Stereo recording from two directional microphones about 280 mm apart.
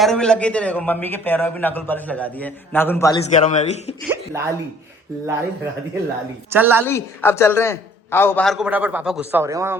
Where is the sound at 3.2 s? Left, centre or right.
Left.